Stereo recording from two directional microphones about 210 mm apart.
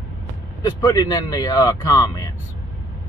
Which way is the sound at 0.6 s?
20° left (ahead or behind).